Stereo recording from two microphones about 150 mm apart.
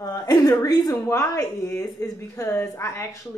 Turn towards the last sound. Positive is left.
turn(degrees=20)  # may be behind; listen again after turning